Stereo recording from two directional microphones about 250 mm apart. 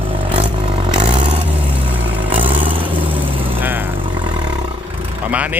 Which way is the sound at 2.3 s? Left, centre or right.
Right.